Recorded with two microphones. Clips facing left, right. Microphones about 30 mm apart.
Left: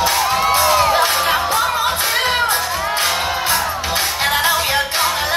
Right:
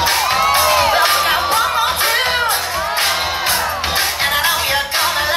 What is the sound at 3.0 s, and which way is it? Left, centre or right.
Music, right.